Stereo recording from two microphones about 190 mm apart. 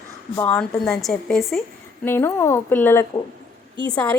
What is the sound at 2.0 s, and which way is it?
A woman's voice, 10° left (ahead or behind).